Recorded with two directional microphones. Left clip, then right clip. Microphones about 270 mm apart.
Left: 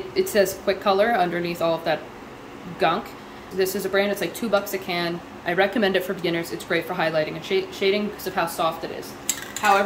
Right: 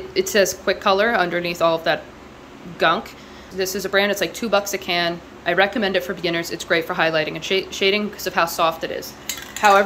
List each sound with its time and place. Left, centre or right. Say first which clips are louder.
0.3 s speech: right 3 dB; centre